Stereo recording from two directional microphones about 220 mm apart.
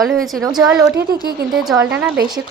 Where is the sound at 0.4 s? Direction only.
15° right (ahead or behind).